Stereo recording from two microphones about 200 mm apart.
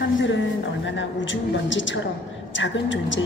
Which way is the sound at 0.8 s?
70° left (ahead or behind).